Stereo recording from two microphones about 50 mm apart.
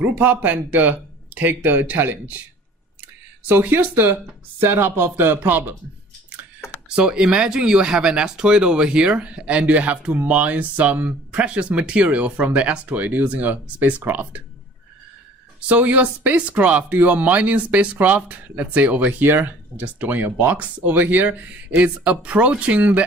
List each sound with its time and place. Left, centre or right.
0.2 s speech: right
3.6 s speech: right
4.6 s speech: right
6.8 s speech: centre; by 14.4 s right
15.7 s speech: right